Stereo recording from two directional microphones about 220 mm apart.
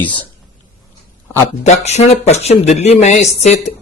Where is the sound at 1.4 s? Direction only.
30° left (ahead or behind).